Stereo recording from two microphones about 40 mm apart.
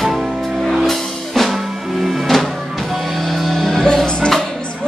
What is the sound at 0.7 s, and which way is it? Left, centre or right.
Music, centre.